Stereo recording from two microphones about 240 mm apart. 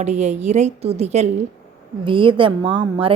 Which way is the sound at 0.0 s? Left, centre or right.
Right.